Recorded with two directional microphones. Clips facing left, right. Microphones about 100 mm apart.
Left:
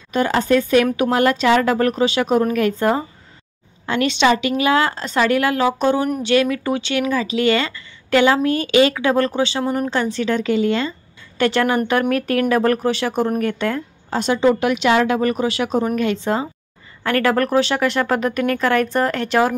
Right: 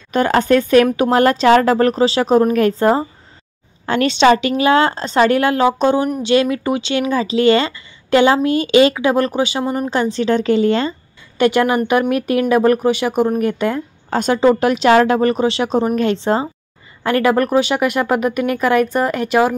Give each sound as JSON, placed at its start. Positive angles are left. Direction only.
{"t": 0.1, "sound": "speech", "side_deg": -55}
{"t": 0.9, "sound": "speech", "side_deg": -35}
{"t": 11.3, "sound": "speech", "side_deg": -15}
{"t": 14.1, "sound": "speech", "side_deg": -50}
{"t": 17.0, "sound": "speech", "side_deg": -15}